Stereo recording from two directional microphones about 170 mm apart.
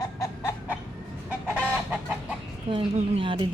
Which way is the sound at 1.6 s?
5° right (ahead or behind).